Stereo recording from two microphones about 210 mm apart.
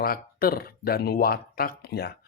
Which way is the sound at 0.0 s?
45° left (ahead or behind).